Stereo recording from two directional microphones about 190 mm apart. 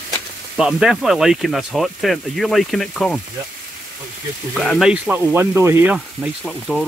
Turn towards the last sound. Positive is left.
turn(degrees=0)  # may be behind; listen again after turning